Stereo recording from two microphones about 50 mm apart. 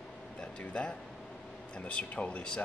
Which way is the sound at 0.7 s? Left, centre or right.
Centre.